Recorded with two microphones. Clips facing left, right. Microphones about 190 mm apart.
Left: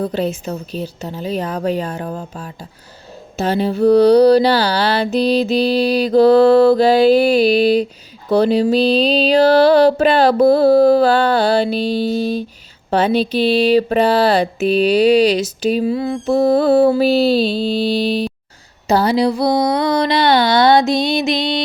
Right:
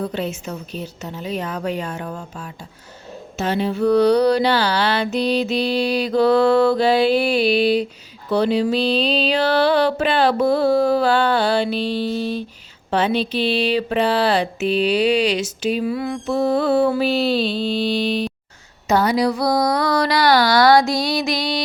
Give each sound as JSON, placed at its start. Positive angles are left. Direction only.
{"t": 0.0, "sound": "mantra", "side_deg": 35}